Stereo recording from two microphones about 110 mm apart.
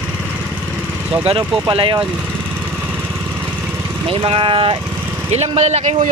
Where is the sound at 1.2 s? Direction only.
60° right (ahead or behind).